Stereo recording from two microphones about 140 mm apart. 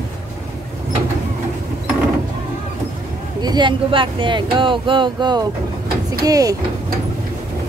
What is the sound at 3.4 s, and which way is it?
Speech, 35° right (ahead or behind).